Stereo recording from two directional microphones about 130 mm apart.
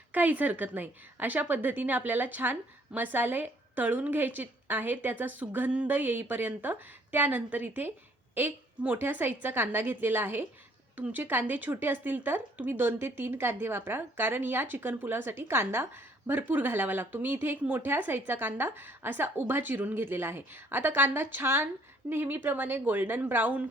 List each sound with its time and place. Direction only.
0.1 s a woman's voice: 15° right (ahead or behind)